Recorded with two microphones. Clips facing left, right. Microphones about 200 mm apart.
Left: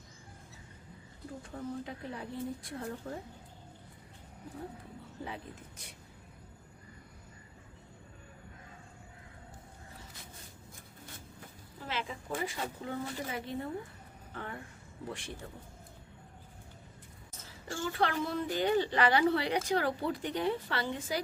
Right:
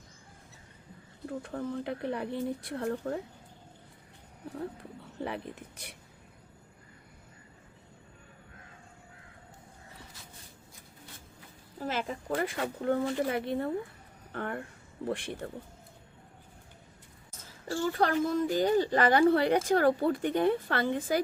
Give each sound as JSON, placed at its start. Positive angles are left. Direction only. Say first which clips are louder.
{"t": 1.3, "sound": "a woman's voice", "louder": "right 5 dB", "side_deg": -65}
{"t": 5.2, "sound": "a woman's voice", "louder": "right 7 dB", "side_deg": -65}
{"t": 11.8, "sound": "speech", "louder": "right 5 dB", "side_deg": -45}
{"t": 17.7, "sound": "a woman's voice", "louder": "right 5 dB", "side_deg": -40}